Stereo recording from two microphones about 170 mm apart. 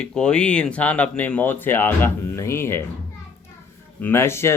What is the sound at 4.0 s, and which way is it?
Speech, 15° left (ahead or behind).